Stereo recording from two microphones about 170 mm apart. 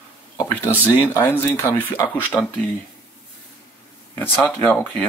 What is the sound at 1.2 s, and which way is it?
Speech, 15° left (ahead or behind).